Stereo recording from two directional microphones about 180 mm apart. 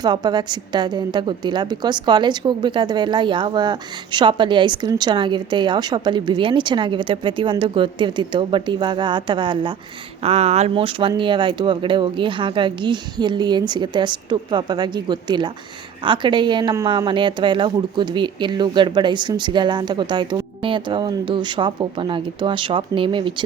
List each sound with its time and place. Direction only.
0.0 s a woman's voice: 25° right (ahead or behind)
10.2 s a woman's voice: 35° right (ahead or behind)